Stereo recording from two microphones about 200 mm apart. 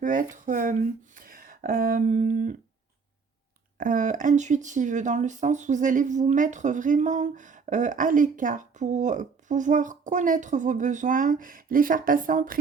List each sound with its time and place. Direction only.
0.0 s speech: 40° right (ahead or behind)
3.8 s speech: 40° right (ahead or behind)